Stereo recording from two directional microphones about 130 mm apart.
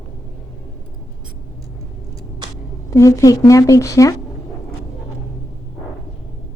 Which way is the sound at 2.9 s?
25° left (ahead or behind).